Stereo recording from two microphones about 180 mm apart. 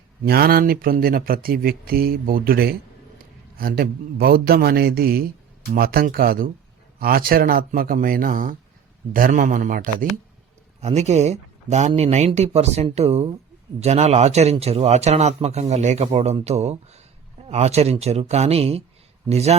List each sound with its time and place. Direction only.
0.3 s speech: 60° right (ahead or behind)
10.8 s a man's voice: 35° right (ahead or behind)